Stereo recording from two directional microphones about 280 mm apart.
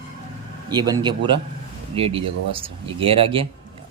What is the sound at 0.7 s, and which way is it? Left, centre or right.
A man's voice, centre.